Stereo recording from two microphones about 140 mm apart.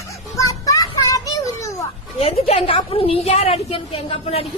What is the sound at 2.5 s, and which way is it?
A woman's voice, 45° left (ahead or behind).